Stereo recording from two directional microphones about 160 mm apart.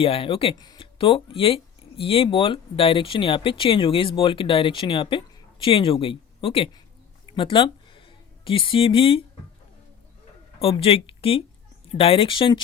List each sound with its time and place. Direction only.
0.0 s speech: 35° left (ahead or behind)
7.3 s a sound: 30° left (ahead or behind)
10.6 s speech: 35° left (ahead or behind)